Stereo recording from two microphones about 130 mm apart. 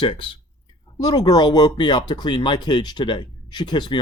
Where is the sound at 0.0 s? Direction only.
40° left (ahead or behind).